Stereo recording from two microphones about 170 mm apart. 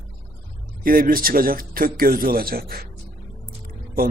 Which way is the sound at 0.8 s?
55° right (ahead or behind).